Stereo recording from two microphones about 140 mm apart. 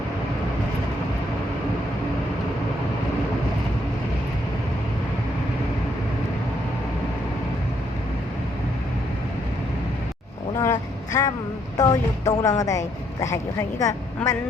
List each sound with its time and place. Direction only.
10.6 s vehicle: 20° left (ahead or behind)
11.8 s a woman's voice: 25° left (ahead or behind)